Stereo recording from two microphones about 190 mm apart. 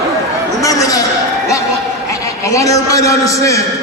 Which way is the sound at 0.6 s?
20° left (ahead or behind).